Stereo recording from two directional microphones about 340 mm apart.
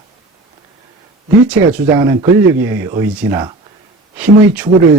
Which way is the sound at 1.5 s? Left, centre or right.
Centre.